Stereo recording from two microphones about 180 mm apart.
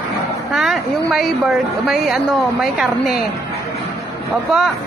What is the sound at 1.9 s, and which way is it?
A woman's voice, centre (ahead or behind).